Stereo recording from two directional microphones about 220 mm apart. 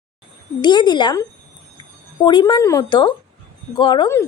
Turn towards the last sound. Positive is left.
turn(degrees=15)  # may be behind; listen again after turning